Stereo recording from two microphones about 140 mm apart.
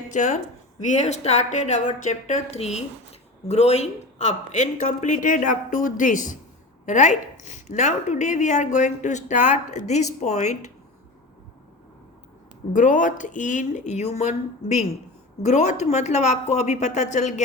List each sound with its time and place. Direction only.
0.1 s a woman's voice: 60° left (ahead or behind)
12.7 s a woman's voice: 65° left (ahead or behind)
15.4 s a woman's voice: 55° left (ahead or behind)